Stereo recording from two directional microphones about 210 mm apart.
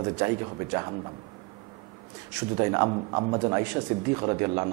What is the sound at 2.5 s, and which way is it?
A man's voice, 20° right (ahead or behind).